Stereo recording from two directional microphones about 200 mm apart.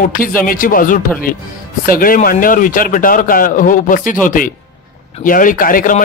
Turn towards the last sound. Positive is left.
turn(degrees=45)  # may be behind; listen again after turning